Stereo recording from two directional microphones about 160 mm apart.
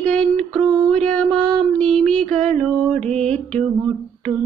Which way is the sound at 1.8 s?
5° left (ahead or behind).